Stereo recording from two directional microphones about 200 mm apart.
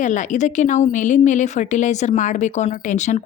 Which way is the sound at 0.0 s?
40° left (ahead or behind).